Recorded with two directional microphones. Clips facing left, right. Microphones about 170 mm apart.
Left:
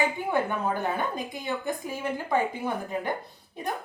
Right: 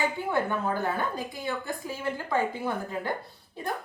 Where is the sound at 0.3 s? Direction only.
15° left (ahead or behind).